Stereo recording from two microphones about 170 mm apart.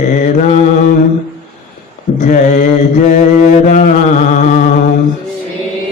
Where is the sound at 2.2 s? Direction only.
45° left (ahead or behind).